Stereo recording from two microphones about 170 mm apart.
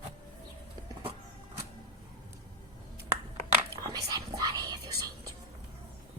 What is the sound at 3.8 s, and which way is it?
Whispering, 20° right (ahead or behind).